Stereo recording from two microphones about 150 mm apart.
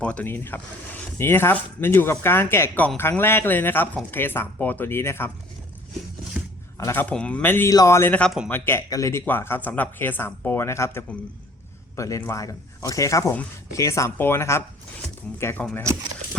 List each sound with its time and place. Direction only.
0.0 s speech: 10° left (ahead or behind)
6.7 s speech: 15° left (ahead or behind)